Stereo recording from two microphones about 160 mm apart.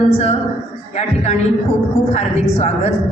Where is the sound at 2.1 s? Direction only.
40° left (ahead or behind).